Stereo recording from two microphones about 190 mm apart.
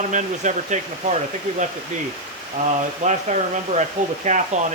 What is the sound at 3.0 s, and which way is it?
Speech, 40° right (ahead or behind).